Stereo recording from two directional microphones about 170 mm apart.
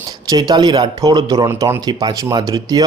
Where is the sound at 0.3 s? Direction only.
25° right (ahead or behind).